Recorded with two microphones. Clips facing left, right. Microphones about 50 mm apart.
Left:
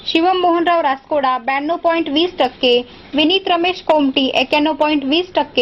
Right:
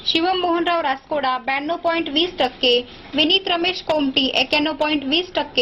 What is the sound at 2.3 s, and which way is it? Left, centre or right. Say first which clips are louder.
A woman's voice: left 3 dB; left.